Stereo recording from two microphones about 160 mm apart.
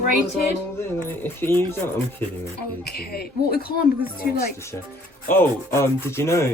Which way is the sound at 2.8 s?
75° left (ahead or behind).